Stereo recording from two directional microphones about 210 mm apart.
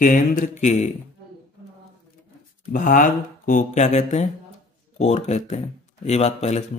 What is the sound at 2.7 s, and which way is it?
Speech, 40° left (ahead or behind).